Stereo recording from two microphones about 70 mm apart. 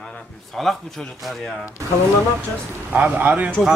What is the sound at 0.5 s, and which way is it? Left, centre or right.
Speech, centre.